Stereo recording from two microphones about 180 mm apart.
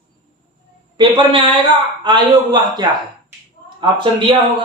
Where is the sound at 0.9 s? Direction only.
25° right (ahead or behind).